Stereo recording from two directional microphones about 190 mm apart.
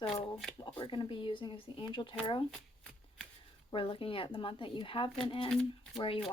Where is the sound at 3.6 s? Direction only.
30° left (ahead or behind).